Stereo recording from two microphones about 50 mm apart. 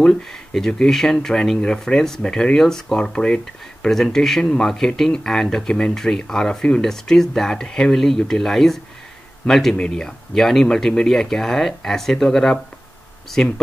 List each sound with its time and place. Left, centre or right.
0.0 s speech: centre
3.8 s a man's voice: centre